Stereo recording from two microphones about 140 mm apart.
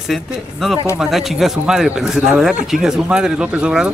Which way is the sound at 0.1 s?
Centre (ahead or behind).